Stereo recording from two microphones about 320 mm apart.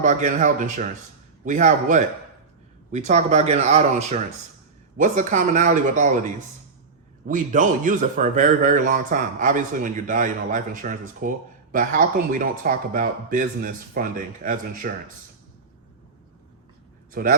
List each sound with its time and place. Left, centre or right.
0.0 s speech: right
7.3 s speech: right
17.1 s speech: right